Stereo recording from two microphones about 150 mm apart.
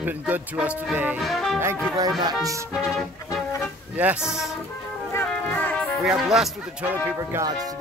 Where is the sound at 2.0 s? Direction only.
25° right (ahead or behind).